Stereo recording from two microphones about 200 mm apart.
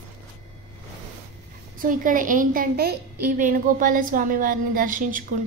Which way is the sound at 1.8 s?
40° right (ahead or behind).